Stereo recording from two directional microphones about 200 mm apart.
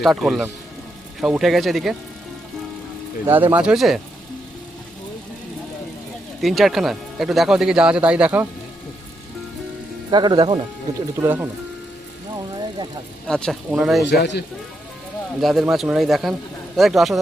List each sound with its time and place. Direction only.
0.0 s speech: centre (ahead or behind)
3.2 s speech: 10° right (ahead or behind)
6.4 s speech: centre (ahead or behind)
10.1 s speech: 20° right (ahead or behind)
11.2 s speech: 10° right (ahead or behind)
13.2 s speech: 5° left (ahead or behind)
14.1 s a man's voice: 60° left (ahead or behind)
15.4 s speech: centre (ahead or behind)